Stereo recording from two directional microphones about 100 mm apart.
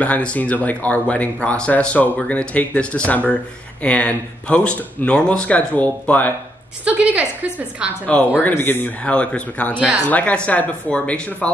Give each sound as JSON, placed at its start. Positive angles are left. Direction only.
{"t": 0.0, "sound": "speech", "side_deg": 15}
{"t": 6.8, "sound": "a woman's voice", "side_deg": -15}
{"t": 8.1, "sound": "speech", "side_deg": 15}